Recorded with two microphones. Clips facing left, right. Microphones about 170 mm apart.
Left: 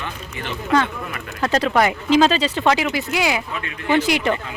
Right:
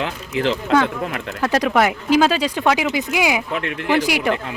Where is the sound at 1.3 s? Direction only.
5° right (ahead or behind).